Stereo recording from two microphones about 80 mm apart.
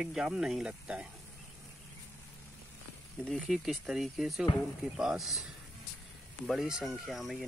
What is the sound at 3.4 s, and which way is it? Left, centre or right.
Speech, centre.